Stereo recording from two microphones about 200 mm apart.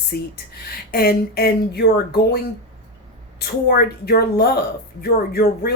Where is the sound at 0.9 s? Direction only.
50° left (ahead or behind).